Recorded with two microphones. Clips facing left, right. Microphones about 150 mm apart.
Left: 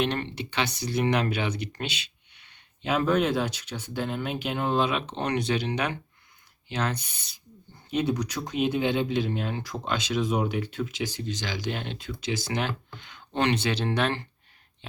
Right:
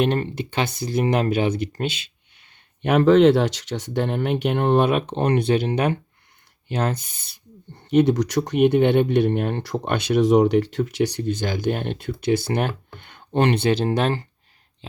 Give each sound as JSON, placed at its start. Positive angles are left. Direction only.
{"t": 0.0, "sound": "speech", "side_deg": -45}
{"t": 2.8, "sound": "speech", "side_deg": -70}
{"t": 7.9, "sound": "speech", "side_deg": -75}